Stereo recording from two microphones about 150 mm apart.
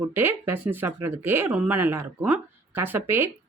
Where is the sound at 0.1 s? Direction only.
15° right (ahead or behind).